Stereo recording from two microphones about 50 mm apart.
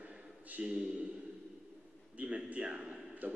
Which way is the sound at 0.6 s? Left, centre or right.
Centre.